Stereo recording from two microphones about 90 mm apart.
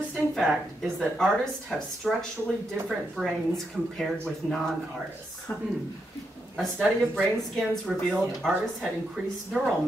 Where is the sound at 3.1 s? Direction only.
Centre (ahead or behind).